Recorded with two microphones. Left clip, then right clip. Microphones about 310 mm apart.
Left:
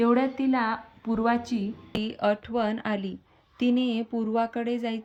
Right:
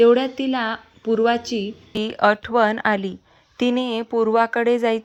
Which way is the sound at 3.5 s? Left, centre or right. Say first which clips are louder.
Right 5 dB; centre.